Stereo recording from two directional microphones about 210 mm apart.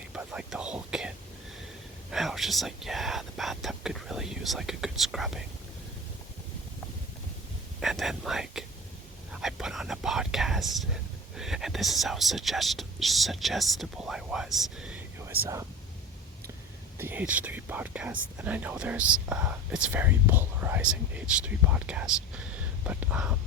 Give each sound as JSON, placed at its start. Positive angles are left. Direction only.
{"t": 0.1, "sound": "speech", "side_deg": -5}
{"t": 7.8, "sound": "speech", "side_deg": 0}
{"t": 17.0, "sound": "speech", "side_deg": -10}